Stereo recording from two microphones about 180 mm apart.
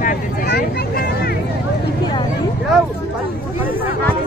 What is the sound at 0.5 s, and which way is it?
Vehicle, 60° left (ahead or behind).